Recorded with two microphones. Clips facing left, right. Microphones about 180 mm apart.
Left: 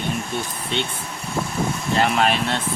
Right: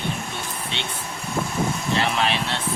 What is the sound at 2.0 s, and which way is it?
Speech, 50° left (ahead or behind).